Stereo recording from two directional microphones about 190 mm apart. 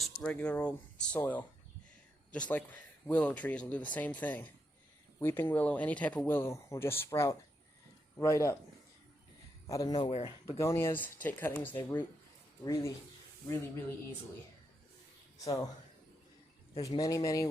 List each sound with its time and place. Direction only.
0.0 s speech: 5° left (ahead or behind)
9.6 s a man's voice: 20° left (ahead or behind)
10.1 s speech: 30° left (ahead or behind)
10.6 s speech: 15° left (ahead or behind)
11.8 s a man's voice: 20° left (ahead or behind)
13.5 s speech: 10° left (ahead or behind)
16.8 s speech: 20° left (ahead or behind)